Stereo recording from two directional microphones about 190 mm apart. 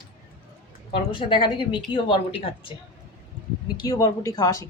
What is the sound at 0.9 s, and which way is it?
Speech, 25° left (ahead or behind).